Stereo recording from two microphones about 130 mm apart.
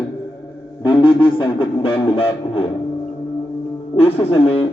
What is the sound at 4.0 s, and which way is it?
Speech, 50° left (ahead or behind).